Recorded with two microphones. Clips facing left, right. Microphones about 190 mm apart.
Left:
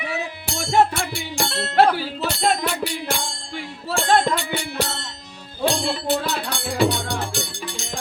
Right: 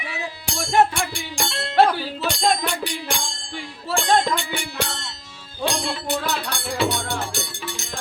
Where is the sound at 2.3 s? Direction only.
5° left (ahead or behind).